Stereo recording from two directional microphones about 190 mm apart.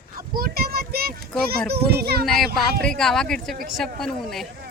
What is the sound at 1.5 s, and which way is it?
Speech, 55° right (ahead or behind).